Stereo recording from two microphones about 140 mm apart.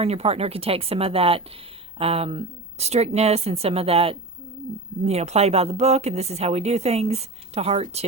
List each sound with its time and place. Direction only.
0.0 s speech: 45° right (ahead or behind)